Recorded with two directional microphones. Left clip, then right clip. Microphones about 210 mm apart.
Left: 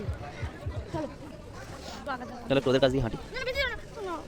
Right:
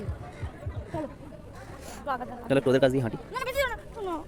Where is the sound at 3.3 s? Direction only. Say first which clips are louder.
Right 2 dB; 35° right (ahead or behind).